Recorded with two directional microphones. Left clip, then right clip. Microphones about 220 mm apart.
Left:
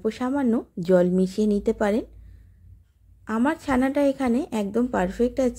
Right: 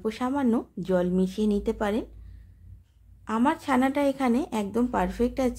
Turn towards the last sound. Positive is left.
turn(degrees=10)  # may be behind; listen again after turning